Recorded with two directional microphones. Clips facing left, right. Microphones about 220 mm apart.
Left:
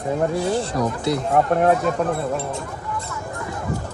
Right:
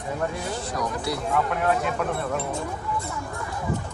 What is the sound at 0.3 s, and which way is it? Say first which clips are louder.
Speech: left 8 dB; 30° left (ahead or behind).